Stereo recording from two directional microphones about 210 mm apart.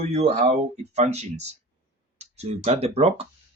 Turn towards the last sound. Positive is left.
turn(degrees=-30)  # may be behind; listen again after turning